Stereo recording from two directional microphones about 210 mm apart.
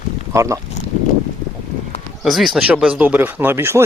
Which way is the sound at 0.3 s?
15° right (ahead or behind).